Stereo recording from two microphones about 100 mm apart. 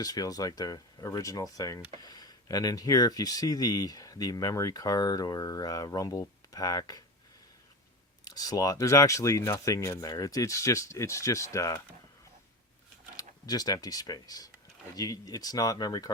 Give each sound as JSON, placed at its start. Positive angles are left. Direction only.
{"t": 0.0, "sound": "speech", "side_deg": 40}
{"t": 8.3, "sound": "speech", "side_deg": 40}
{"t": 13.1, "sound": "speech", "side_deg": 40}